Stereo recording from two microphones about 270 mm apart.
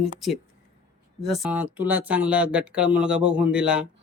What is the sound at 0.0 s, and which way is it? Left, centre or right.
Speech, centre.